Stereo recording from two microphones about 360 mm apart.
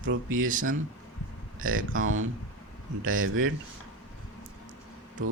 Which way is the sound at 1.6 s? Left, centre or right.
Right.